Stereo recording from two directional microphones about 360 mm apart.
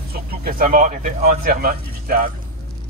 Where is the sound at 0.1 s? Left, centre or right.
Right.